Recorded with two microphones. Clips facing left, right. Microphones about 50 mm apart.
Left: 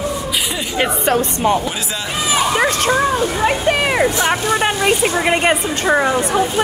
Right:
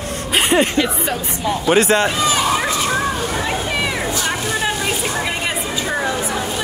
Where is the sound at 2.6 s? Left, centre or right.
Left.